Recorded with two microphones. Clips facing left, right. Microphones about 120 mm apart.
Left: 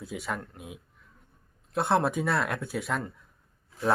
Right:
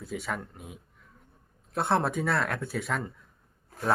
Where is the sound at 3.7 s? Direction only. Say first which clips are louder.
Left 2 dB; 50° right (ahead or behind).